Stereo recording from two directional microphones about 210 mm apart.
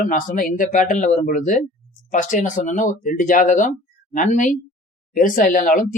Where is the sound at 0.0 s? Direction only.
40° left (ahead or behind).